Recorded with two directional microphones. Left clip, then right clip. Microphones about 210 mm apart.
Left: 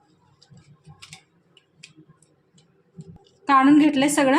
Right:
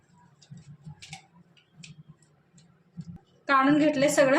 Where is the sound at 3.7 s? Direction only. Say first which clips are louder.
Left 5 dB; 45° left (ahead or behind).